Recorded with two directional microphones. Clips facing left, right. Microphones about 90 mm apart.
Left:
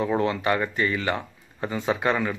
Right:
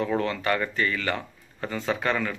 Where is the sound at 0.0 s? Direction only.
20° left (ahead or behind).